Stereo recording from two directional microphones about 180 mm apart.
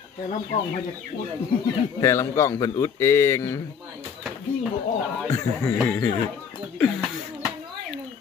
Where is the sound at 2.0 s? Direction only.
15° left (ahead or behind).